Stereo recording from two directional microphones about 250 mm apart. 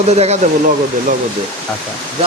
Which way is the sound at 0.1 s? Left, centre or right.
Right.